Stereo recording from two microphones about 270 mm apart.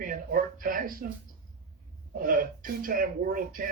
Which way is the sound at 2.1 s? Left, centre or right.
Right.